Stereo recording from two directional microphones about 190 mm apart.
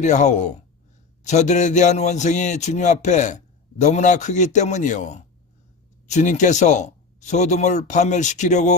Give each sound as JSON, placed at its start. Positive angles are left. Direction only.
{"t": 0.0, "sound": "a man's voice", "side_deg": 40}